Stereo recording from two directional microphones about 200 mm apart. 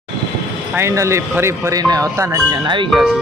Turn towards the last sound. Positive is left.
turn(degrees=0)  # may be behind; listen again after turning